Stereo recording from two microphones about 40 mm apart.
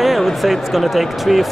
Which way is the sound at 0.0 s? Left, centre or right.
Centre.